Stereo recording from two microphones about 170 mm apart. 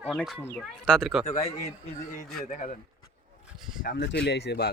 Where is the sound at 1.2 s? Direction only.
40° left (ahead or behind).